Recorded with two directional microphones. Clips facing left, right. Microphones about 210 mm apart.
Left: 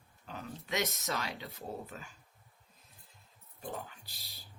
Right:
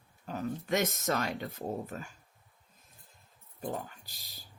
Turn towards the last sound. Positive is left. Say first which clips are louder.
# right 1 dB
turn(degrees=-45)  # may be behind; listen again after turning